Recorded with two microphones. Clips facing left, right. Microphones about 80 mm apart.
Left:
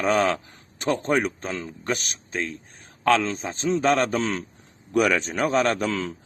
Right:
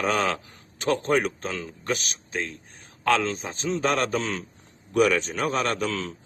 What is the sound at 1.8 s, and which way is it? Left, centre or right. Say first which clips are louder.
Speech: even; left.